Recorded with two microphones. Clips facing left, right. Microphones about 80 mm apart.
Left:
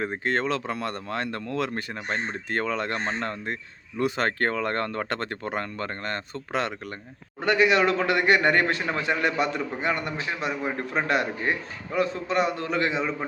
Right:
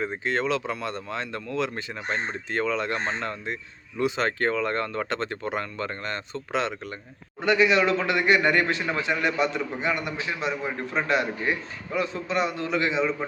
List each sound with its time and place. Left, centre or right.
0.0 s speech: left